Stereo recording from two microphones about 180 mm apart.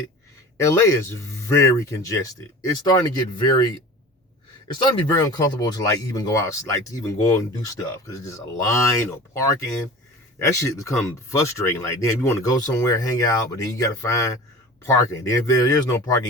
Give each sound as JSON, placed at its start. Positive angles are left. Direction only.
{"t": 0.5, "sound": "speech", "side_deg": 15}
{"t": 4.7, "sound": "speech", "side_deg": 20}